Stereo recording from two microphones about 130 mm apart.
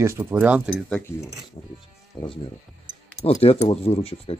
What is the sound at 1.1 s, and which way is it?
Speech, 20° left (ahead or behind).